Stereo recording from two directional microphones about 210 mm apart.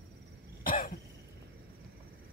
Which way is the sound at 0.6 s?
45° left (ahead or behind).